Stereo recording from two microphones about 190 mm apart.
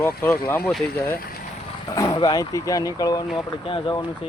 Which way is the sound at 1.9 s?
20° left (ahead or behind).